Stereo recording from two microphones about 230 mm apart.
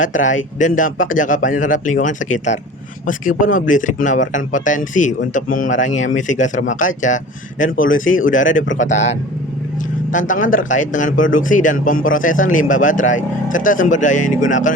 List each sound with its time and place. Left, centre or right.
0.0 s speech: left
10.1 s speech: left